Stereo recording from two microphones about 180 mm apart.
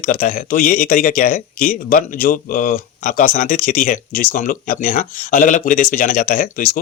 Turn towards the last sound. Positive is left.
turn(degrees=50)  # may be behind; listen again after turning